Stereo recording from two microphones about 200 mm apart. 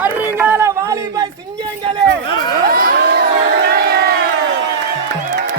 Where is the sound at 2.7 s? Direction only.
45° right (ahead or behind).